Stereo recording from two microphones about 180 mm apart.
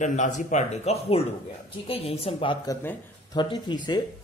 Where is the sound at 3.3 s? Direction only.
25° left (ahead or behind).